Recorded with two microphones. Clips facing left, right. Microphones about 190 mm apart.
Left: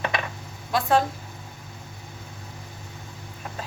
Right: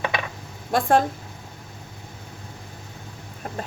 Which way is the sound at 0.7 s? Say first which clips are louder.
Right 3 dB; 50° right (ahead or behind).